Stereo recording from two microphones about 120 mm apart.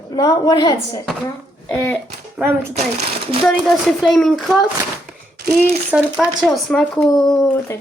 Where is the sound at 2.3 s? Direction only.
15° right (ahead or behind).